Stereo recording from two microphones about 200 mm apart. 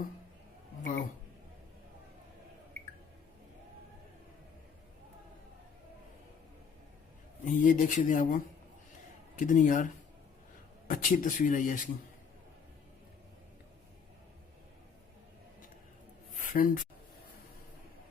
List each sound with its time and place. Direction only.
0.8 s a man's voice: 40° left (ahead or behind)
7.4 s speech: 40° left (ahead or behind)
16.4 s speech: 45° left (ahead or behind)